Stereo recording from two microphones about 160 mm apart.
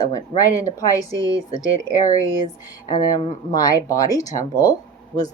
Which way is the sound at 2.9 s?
25° left (ahead or behind).